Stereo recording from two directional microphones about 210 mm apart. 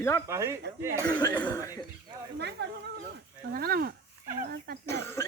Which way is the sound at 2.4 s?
55° right (ahead or behind).